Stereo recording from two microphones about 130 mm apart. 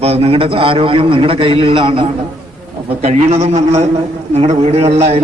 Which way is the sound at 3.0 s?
55° right (ahead or behind).